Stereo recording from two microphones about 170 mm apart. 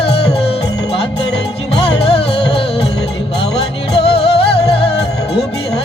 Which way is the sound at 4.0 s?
35° left (ahead or behind).